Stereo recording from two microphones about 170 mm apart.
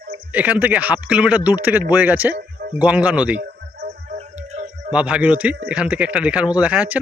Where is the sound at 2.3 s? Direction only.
65° right (ahead or behind).